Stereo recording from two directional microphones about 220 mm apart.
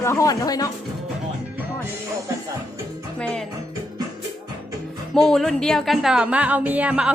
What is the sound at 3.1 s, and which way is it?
Speech, 5° left (ahead or behind).